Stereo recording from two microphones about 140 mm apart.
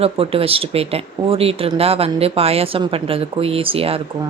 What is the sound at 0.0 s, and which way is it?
Speech, 45° right (ahead or behind).